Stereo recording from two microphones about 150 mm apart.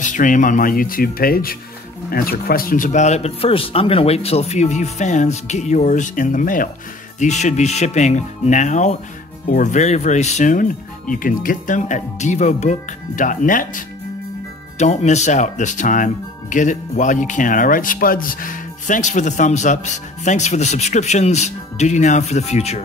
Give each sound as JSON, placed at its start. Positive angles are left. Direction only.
{"t": 0.0, "sound": "speech", "side_deg": 60}
{"t": 7.2, "sound": "speech", "side_deg": 50}
{"t": 14.8, "sound": "speech", "side_deg": 50}